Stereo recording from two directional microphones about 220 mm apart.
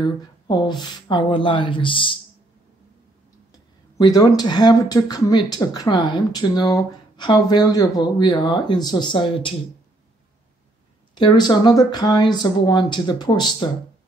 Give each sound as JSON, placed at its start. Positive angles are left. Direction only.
{"t": 0.0, "sound": "speech", "side_deg": 20}
{"t": 4.0, "sound": "speech", "side_deg": 20}
{"t": 11.1, "sound": "speech", "side_deg": 20}